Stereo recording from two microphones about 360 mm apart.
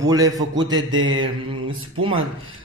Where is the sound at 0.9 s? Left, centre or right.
Right.